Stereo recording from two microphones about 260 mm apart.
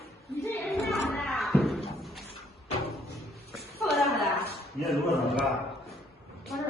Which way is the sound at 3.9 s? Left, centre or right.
Centre.